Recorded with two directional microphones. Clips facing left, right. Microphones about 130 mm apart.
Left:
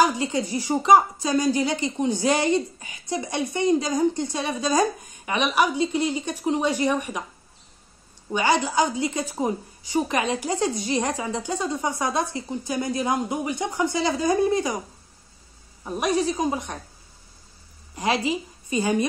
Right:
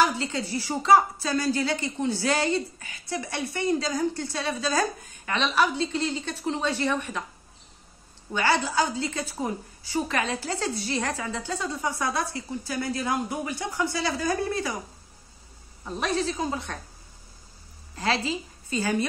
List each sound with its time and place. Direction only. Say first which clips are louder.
0.0 s speech: left 3 dB; 15° left (ahead or behind)
8.3 s a woman's voice: left 3 dB; 15° left (ahead or behind)
15.8 s speech: left 4 dB; 15° left (ahead or behind)
17.9 s a woman's voice: left 3 dB; 15° left (ahead or behind)